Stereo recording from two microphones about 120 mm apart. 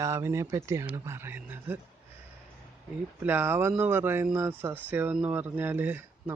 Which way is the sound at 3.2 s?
15° right (ahead or behind).